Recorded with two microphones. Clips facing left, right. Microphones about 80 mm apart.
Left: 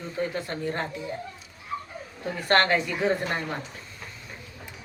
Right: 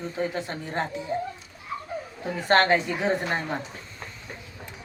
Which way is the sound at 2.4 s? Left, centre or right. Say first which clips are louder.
Right 2 dB; right.